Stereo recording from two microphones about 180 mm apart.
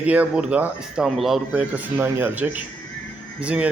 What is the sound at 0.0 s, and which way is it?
Speech, 10° right (ahead or behind).